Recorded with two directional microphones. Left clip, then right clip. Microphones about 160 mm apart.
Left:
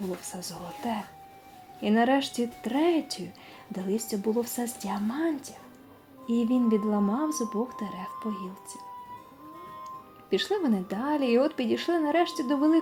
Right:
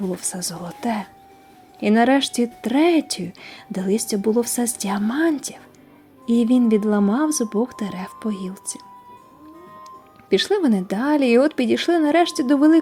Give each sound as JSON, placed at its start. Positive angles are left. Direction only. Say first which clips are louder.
{"t": 0.2, "sound": "speech", "louder": "right 9 dB", "side_deg": -35}
{"t": 10.2, "sound": "speech", "louder": "right 9 dB", "side_deg": -35}